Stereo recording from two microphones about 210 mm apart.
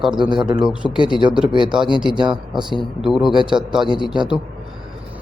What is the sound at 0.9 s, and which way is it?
Speech, 25° left (ahead or behind).